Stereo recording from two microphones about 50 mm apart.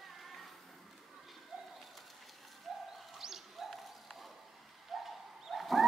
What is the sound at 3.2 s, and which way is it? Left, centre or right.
Bird, centre.